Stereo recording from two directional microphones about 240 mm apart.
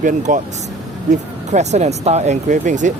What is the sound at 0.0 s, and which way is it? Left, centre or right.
Speech, right.